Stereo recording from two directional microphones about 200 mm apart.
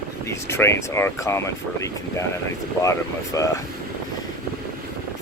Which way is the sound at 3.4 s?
15° left (ahead or behind).